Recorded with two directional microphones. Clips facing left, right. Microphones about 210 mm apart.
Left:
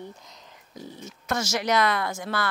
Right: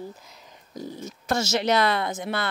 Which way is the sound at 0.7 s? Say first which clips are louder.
Right 5 dB; 40° right (ahead or behind).